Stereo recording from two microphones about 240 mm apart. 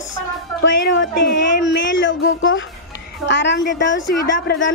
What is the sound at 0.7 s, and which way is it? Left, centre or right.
A woman's voice, left.